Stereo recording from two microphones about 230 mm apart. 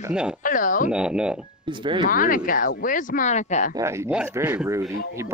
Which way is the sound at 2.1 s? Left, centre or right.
Left.